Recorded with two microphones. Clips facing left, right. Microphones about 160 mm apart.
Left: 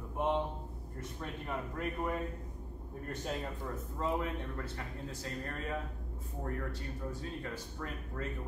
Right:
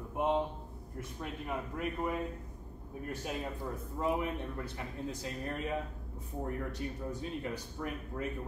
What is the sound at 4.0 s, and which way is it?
Speech, 15° right (ahead or behind).